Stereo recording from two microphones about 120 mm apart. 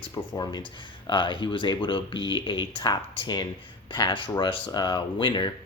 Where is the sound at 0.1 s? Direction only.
35° left (ahead or behind).